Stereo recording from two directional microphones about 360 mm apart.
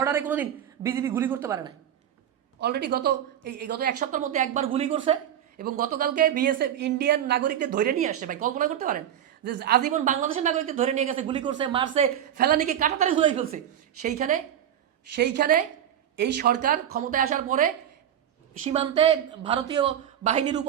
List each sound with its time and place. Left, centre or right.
0.0 s a woman's voice: centre
2.6 s a woman's voice: right